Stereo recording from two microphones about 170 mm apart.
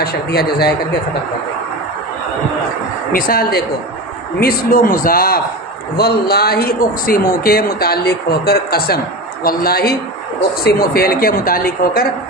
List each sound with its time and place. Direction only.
0.0 s speech: 70° left (ahead or behind)
3.1 s speech: 60° left (ahead or behind)